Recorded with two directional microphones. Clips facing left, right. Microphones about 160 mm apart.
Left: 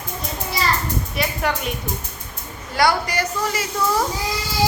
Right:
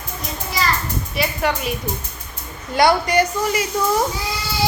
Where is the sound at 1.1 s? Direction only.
Centre (ahead or behind).